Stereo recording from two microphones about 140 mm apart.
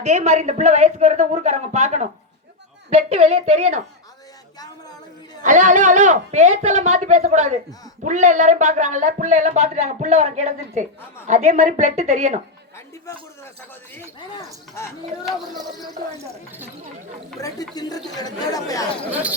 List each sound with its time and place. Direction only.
0.0 s a woman's voice: 55° right (ahead or behind)
4.6 s a sound: 30° left (ahead or behind)
5.4 s a woman's voice: 65° right (ahead or behind)
16.1 s speech: 15° right (ahead or behind)
17.4 s speech: 25° left (ahead or behind)